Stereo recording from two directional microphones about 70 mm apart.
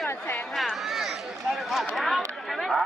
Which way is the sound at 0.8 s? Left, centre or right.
Centre.